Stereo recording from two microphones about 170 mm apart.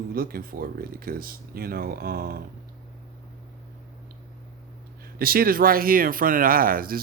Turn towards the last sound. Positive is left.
turn(degrees=-60)  # may be behind; listen again after turning